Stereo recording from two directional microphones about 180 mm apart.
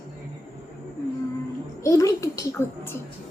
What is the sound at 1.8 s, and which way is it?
Speech, 15° left (ahead or behind).